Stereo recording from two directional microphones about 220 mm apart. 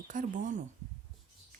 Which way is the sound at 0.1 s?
35° right (ahead or behind).